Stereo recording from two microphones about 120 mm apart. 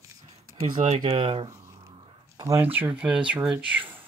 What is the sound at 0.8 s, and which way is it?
Speech, 65° right (ahead or behind).